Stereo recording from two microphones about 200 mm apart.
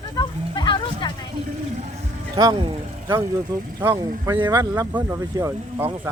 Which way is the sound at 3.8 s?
15° right (ahead or behind).